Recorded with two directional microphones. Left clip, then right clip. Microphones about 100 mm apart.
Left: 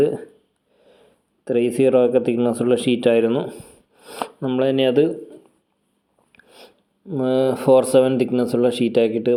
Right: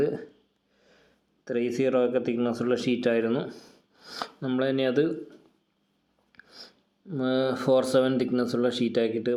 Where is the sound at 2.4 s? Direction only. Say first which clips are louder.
Left 8 dB; 40° left (ahead or behind).